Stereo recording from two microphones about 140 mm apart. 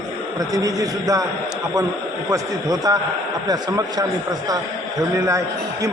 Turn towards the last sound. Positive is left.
turn(degrees=-20)  # may be behind; listen again after turning